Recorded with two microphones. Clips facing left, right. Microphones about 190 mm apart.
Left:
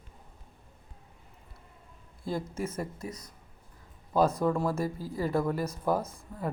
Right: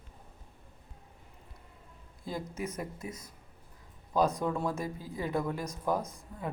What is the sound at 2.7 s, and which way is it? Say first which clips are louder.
Speech: left 2 dB; 20° right (ahead or behind).